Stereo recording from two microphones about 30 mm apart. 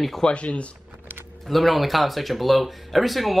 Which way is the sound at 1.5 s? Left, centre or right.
Centre.